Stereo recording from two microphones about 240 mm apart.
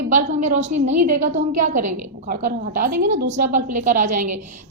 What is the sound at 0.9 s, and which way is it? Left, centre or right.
Speech, right.